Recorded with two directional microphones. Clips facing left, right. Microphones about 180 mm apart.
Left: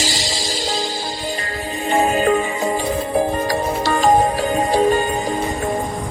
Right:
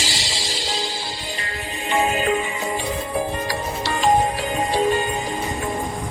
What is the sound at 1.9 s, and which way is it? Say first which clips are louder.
Music: left 4 dB; 40° left (ahead or behind).